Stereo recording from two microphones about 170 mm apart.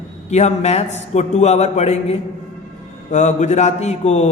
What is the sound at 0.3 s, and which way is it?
Speech, 40° left (ahead or behind).